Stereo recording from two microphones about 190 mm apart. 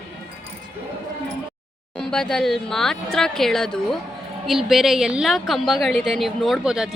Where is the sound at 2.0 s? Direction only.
5° left (ahead or behind).